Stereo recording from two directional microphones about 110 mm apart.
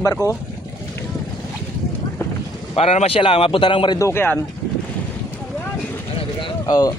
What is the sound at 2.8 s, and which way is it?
Speech, 65° left (ahead or behind).